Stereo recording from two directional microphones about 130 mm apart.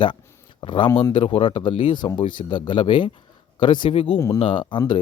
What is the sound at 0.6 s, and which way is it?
A man's voice, 40° left (ahead or behind).